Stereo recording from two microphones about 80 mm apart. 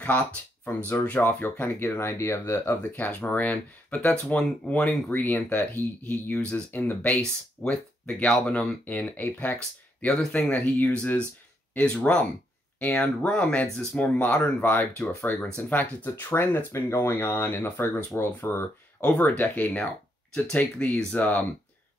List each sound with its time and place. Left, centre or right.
1.0 s speech: centre
15.3 s speech: centre
15.7 s speech: left
18.4 s speech: left
19.2 s speech: left